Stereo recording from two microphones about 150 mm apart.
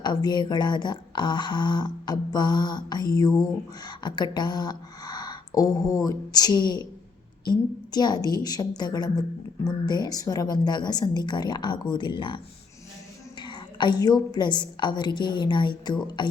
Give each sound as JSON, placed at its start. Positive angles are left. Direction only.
{"t": 0.0, "sound": "speech", "side_deg": 30}
{"t": 7.9, "sound": "speech", "side_deg": 25}
{"t": 13.4, "sound": "speech", "side_deg": 30}